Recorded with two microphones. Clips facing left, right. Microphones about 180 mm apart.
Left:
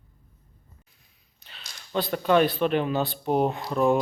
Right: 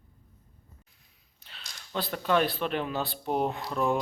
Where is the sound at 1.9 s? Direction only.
Centre (ahead or behind).